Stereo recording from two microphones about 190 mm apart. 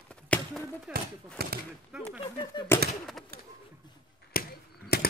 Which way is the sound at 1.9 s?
5° right (ahead or behind).